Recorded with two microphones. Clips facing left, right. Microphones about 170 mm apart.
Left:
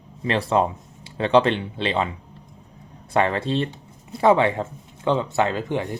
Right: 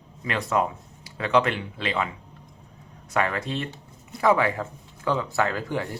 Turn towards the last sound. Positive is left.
turn(degrees=20)  # may be behind; listen again after turning